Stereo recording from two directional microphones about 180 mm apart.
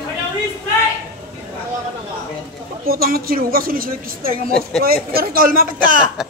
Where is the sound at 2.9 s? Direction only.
55° right (ahead or behind).